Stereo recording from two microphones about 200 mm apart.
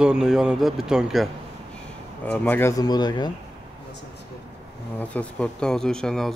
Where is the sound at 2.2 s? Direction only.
10° left (ahead or behind).